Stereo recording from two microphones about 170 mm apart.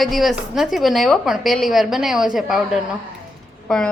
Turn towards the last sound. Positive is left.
turn(degrees=5)  # may be behind; listen again after turning